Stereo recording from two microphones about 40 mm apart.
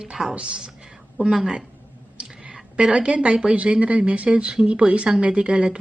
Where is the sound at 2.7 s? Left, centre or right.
Right.